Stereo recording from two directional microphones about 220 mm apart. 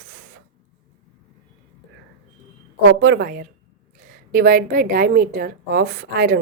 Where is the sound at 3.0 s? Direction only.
50° right (ahead or behind).